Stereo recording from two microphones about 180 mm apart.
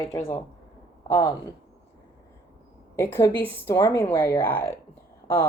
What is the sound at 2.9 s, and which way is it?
Speech, 15° left (ahead or behind).